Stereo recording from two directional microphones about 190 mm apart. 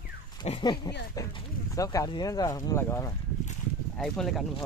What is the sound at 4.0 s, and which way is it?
Speech, centre (ahead or behind).